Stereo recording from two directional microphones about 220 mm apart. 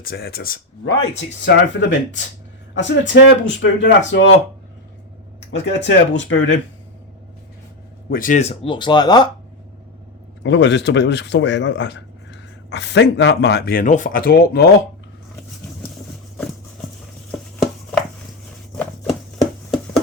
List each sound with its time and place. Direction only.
0.0 s speech: 45° left (ahead or behind)
5.4 s speech: 55° left (ahead or behind)
8.1 s speech: 35° left (ahead or behind); by 9.3 s 20° left (ahead or behind)
10.4 s speech: 55° left (ahead or behind)